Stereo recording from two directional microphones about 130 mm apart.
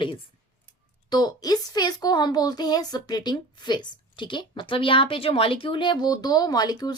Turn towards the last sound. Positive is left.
turn(degrees=30)  # may be behind; listen again after turning